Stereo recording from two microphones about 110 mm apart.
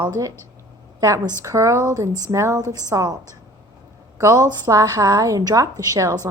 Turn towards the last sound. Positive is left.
turn(degrees=-30)  # may be behind; listen again after turning